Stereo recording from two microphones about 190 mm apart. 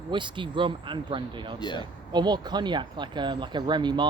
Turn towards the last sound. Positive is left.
turn(degrees=-25)  # may be behind; listen again after turning